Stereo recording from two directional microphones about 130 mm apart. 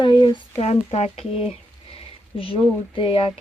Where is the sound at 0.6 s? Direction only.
55° left (ahead or behind).